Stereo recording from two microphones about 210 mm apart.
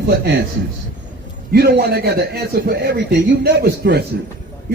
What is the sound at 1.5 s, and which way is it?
A man's voice, 50° right (ahead or behind).